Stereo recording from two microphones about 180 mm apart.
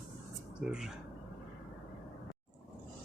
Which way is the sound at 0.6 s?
5° right (ahead or behind).